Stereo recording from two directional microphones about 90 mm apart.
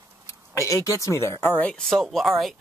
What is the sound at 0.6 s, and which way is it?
Speech, 40° left (ahead or behind).